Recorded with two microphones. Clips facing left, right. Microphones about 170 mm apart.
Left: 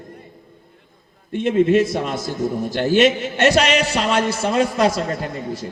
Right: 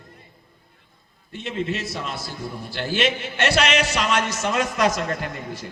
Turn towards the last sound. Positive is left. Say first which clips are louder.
# left 5 dB
turn(degrees=25)  # may be behind; listen again after turning